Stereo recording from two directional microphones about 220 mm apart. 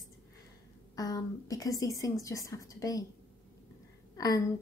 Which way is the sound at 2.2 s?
15° left (ahead or behind).